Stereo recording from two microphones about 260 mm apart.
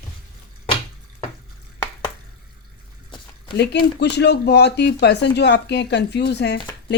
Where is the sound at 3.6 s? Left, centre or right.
Left.